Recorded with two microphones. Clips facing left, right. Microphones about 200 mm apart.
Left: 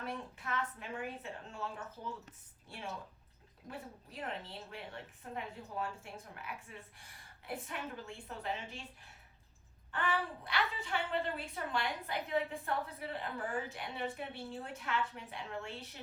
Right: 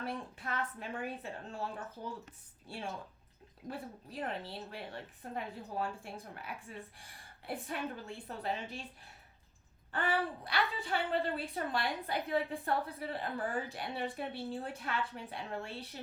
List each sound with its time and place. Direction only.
0.0 s a woman's voice: 35° right (ahead or behind)
2.6 s a woman's voice: 30° right (ahead or behind)
9.9 s a woman's voice: 35° right (ahead or behind)